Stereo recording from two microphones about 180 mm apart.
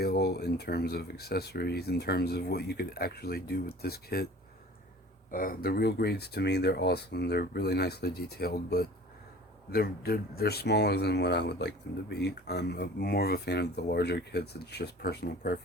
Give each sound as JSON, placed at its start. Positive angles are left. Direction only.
{"t": 0.0, "sound": "speech", "side_deg": 65}
{"t": 5.3, "sound": "speech", "side_deg": 55}